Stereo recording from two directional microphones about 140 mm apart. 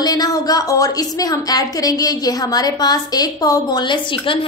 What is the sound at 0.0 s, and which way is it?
A woman's voice, 25° left (ahead or behind).